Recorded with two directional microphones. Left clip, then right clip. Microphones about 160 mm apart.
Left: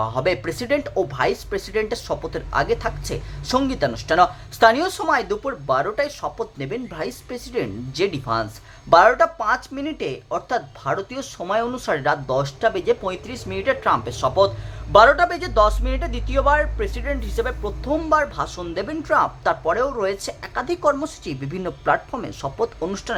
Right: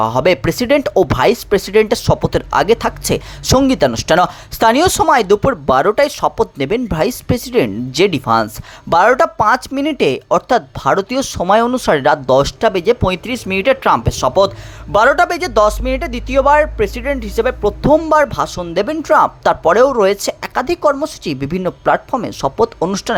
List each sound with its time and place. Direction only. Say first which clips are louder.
0.0 s speech: right 9 dB; 45° right (ahead or behind)
0.9 s speech: right 9 dB; 55° right (ahead or behind)